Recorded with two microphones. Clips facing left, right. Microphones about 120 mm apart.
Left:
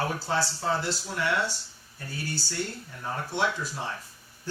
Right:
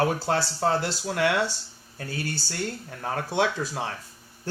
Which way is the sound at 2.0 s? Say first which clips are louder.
Right 3 dB; 60° right (ahead or behind).